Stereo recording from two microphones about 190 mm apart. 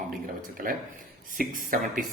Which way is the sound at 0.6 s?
50° right (ahead or behind).